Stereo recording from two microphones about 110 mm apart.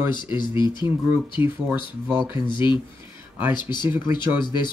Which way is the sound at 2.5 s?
45° left (ahead or behind).